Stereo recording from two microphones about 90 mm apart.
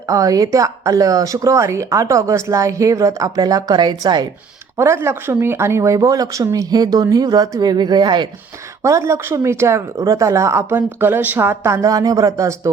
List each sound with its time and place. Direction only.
0.1 s speech: 40° right (ahead or behind)
4.8 s speech: 30° right (ahead or behind); by 8.3 s 55° right (ahead or behind)
8.8 s speech: 35° right (ahead or behind)